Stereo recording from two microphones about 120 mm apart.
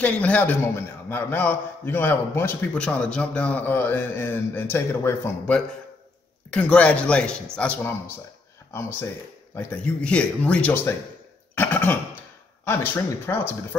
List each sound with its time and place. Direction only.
0.0 s a man's voice: 10° left (ahead or behind)
9.6 s a man's voice: 15° left (ahead or behind)
11.5 s cough: 15° left (ahead or behind)
12.6 s speech: 20° left (ahead or behind)